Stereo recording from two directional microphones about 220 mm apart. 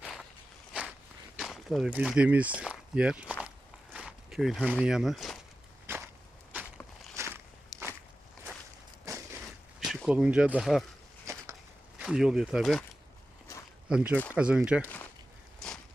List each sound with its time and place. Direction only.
0.0 s walk: centre (ahead or behind)
1.4 s speech: centre (ahead or behind)
5.8 s a sound: 10° right (ahead or behind)
7.2 s walk: 10° right (ahead or behind)
7.7 s walk: 15° left (ahead or behind)
9.0 s a sound: 15° right (ahead or behind)
9.8 s speech: centre (ahead or behind)
11.3 s a sound: 15° right (ahead or behind)
11.9 s speech: centre (ahead or behind)
13.8 s speech: 5° right (ahead or behind)